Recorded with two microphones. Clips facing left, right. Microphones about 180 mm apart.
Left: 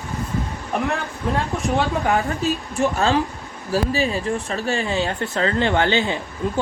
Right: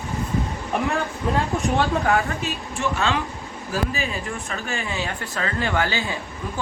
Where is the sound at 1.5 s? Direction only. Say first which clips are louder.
Left 1 dB; centre (ahead or behind).